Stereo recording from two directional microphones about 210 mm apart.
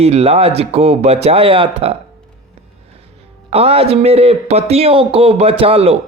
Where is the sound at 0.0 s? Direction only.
30° right (ahead or behind).